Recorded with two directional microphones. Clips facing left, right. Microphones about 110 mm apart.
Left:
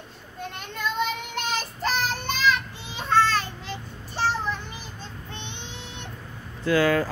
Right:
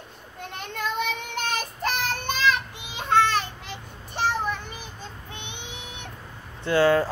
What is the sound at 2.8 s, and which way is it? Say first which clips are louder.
Child singing: even; 15° right (ahead or behind).